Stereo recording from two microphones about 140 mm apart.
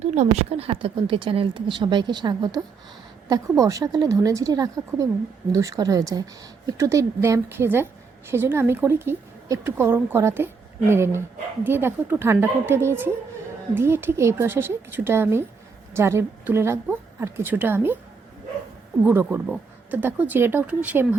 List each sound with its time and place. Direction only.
0.0 s a woman's voice: 55° right (ahead or behind); by 17.9 s 15° right (ahead or behind)
19.0 s a woman's voice: 15° right (ahead or behind)